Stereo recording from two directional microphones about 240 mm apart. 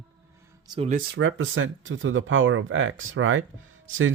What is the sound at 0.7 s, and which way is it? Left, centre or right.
Speech, right.